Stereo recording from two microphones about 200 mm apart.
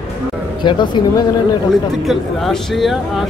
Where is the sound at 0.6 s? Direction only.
20° left (ahead or behind).